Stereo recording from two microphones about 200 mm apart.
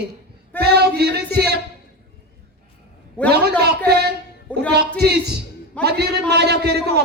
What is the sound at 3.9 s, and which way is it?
Speech, 55° right (ahead or behind).